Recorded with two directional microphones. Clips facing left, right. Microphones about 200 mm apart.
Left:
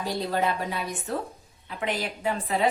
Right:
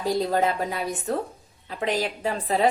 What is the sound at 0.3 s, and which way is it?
A woman's voice, 40° right (ahead or behind).